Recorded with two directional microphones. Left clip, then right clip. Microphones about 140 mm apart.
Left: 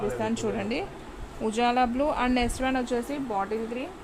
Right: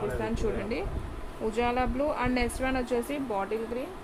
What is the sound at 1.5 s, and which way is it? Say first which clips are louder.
A woman's voice: left 4 dB; 80° left.